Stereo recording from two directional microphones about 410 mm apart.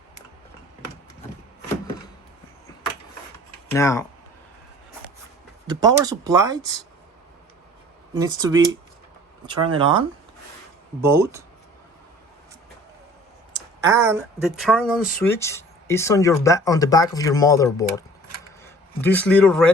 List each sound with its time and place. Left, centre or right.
3.7 s speech: centre
5.6 s speech: centre
8.2 s speech: centre
11.0 s speech: centre
13.8 s a man's voice: centre